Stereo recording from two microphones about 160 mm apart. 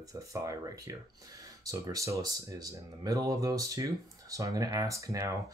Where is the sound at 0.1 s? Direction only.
20° right (ahead or behind).